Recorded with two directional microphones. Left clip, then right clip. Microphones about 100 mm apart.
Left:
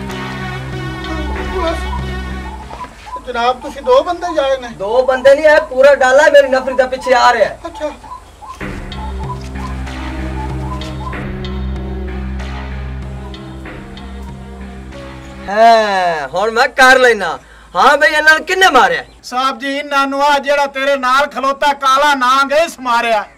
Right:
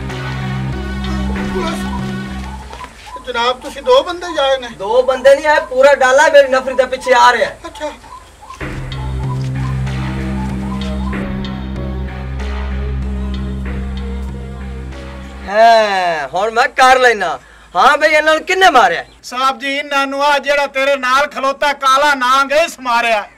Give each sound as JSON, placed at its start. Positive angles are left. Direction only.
{"t": 0.1, "sound": "music", "side_deg": 0}
{"t": 3.3, "sound": "speech", "side_deg": -15}
{"t": 9.4, "sound": "music", "side_deg": 5}
{"t": 15.4, "sound": "speech", "side_deg": 0}